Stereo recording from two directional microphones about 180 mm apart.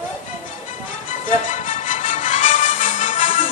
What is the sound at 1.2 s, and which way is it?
Music, 45° left (ahead or behind).